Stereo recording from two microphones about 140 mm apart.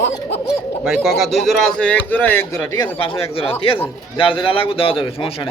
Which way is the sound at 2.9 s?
40° left (ahead or behind).